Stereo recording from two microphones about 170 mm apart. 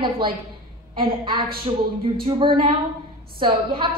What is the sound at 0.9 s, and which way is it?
A woman's voice, 30° right (ahead or behind).